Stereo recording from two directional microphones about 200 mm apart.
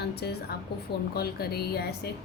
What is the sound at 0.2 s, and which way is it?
A woman's voice, 55° left (ahead or behind).